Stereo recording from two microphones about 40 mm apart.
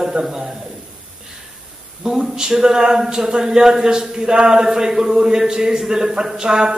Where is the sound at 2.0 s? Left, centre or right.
Centre.